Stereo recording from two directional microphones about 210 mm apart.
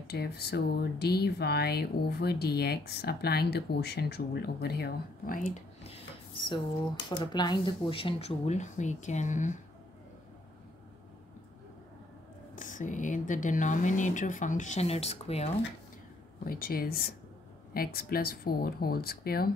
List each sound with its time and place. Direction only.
0.0 s speech: 50° left (ahead or behind)
6.3 s speech: 25° left (ahead or behind)
12.5 s speech: 40° left (ahead or behind)
16.4 s speech: 45° left (ahead or behind)